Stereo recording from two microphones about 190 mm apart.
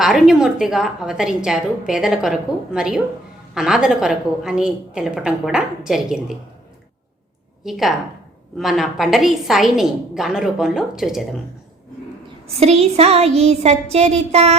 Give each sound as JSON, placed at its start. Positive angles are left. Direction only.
{"t": 0.0, "sound": "a woman's voice", "side_deg": -5}
{"t": 7.6, "sound": "a woman's voice", "side_deg": 0}
{"t": 12.5, "sound": "a sound", "side_deg": -35}